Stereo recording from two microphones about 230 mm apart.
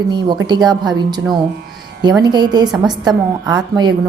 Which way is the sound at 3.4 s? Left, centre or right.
Centre.